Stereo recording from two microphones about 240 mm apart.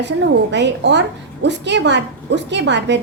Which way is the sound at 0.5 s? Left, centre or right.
Right.